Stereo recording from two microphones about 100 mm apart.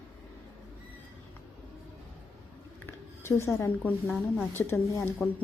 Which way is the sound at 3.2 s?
25° left (ahead or behind).